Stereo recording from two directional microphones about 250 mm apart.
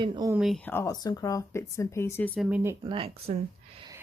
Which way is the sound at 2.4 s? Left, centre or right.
Centre.